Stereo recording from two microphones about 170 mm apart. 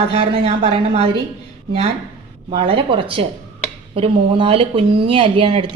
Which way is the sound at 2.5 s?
35° right (ahead or behind).